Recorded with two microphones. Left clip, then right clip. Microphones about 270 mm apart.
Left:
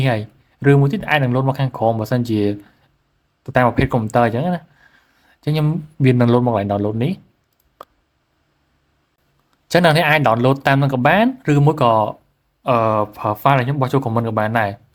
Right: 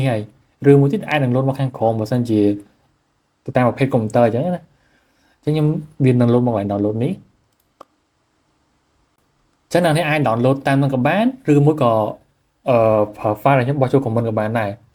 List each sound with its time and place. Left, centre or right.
0.0 s speech: left
9.6 s speech: left